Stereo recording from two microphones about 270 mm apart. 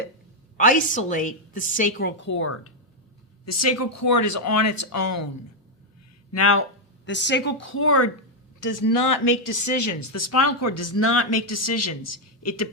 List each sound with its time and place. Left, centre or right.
0.5 s a woman's voice: left
3.4 s speech: left
6.3 s speech: left
7.0 s a woman's voice: left
8.6 s speech: left